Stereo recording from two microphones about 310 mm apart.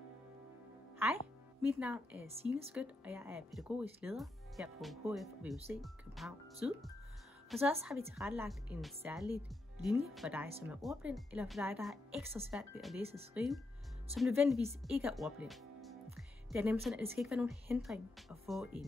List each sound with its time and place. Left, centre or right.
1.7 s speech: centre
7.8 s speech: centre
13.0 s speech: centre
13.3 s speech: centre